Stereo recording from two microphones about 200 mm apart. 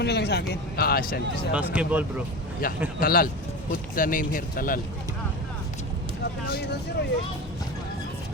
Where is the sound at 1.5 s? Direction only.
5° right (ahead or behind).